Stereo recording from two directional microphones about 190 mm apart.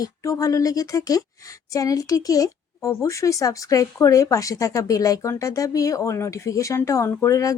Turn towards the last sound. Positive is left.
turn(degrees=15)  # may be behind; listen again after turning